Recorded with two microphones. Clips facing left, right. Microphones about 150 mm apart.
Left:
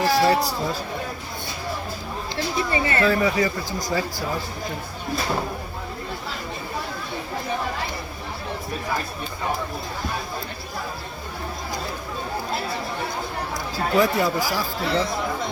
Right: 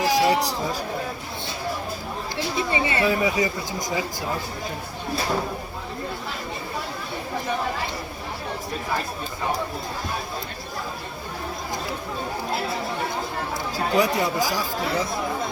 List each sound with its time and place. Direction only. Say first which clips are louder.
0.0 s speech: left 1 dB; 15° right (ahead or behind)
2.3 s speech: left 1 dB; 15° right (ahead or behind)
13.7 s speech: left 1 dB; 15° right (ahead or behind)